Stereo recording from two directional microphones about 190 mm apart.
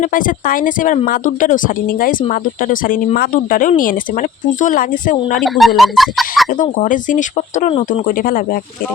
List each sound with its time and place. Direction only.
0.0 s speech: 45° left (ahead or behind)
5.4 s speech: centre (ahead or behind)
6.5 s speech: 40° left (ahead or behind)